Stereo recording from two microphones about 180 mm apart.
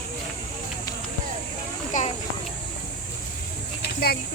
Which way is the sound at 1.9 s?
45° left (ahead or behind).